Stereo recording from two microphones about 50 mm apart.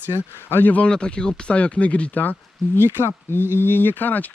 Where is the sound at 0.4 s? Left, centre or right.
Left.